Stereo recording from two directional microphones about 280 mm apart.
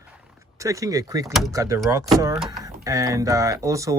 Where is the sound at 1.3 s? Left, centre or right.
Centre.